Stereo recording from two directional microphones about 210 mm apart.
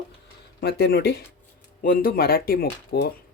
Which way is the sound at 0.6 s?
50° left (ahead or behind).